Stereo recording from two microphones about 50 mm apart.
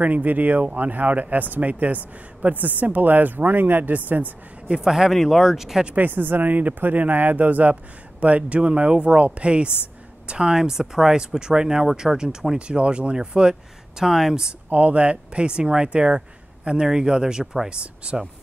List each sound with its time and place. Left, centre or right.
0.0 s speech: right
4.6 s speech: centre
5.9 s speech: right; by 14.5 s centre
14.7 s speech: right